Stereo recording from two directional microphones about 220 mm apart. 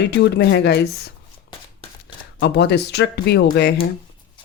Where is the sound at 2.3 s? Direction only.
50° left (ahead or behind).